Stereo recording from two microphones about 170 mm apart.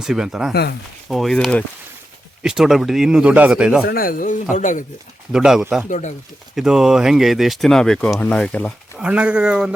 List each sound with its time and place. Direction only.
0.0 s speech: 5° right (ahead or behind)
3.8 s speech: 60° left (ahead or behind)
5.3 s speech: 5° right (ahead or behind)
5.9 s speech: 45° left (ahead or behind)
6.6 s speech: 5° right (ahead or behind)
9.0 s speech: 5° right (ahead or behind)